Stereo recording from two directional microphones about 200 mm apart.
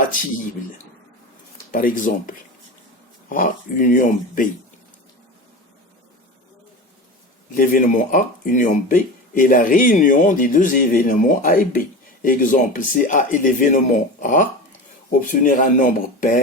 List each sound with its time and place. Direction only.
0.1 s a man's voice: 40° left (ahead or behind)
1.7 s a man's voice: 45° left (ahead or behind)
7.5 s a man's voice: 45° left (ahead or behind)